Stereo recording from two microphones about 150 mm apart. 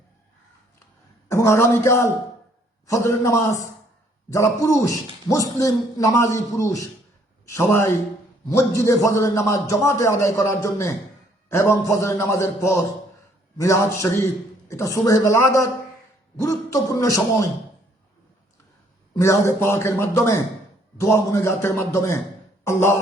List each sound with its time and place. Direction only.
1.3 s a man's voice: 20° left (ahead or behind)
19.1 s a man's voice: 20° left (ahead or behind)